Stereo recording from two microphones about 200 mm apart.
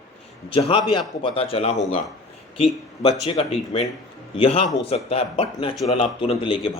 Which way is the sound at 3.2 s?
30° left (ahead or behind).